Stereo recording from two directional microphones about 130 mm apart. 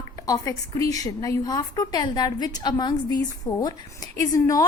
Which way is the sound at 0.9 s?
25° left (ahead or behind).